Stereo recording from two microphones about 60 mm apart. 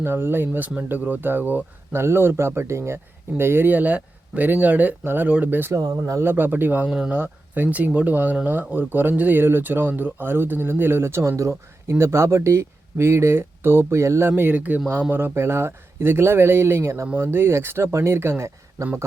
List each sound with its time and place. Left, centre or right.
0.0 s speech: right
2.0 s speech: right
5.7 s speech: right
6.2 s speech: right
6.8 s speech: centre
7.2 s speech: right
15.1 s speech: right